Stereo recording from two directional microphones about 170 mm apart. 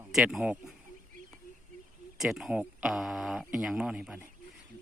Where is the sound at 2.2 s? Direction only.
Centre (ahead or behind).